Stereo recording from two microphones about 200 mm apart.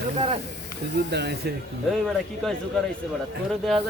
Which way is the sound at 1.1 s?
55° right (ahead or behind).